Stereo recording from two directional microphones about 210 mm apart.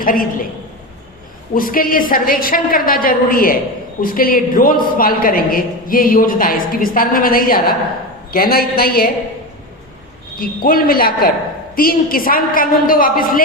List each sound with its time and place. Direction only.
0.0 s a woman's voice: 45° left (ahead or behind)
1.5 s a woman's voice: 40° left (ahead or behind)
10.3 s a woman's voice: 45° left (ahead or behind)